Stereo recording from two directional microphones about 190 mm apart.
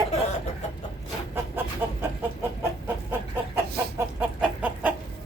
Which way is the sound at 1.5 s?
10° right (ahead or behind).